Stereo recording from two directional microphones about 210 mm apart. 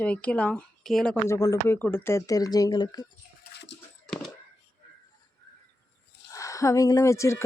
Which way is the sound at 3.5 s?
55° left (ahead or behind).